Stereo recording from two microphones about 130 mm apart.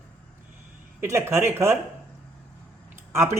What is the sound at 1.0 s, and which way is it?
Speech, 20° right (ahead or behind).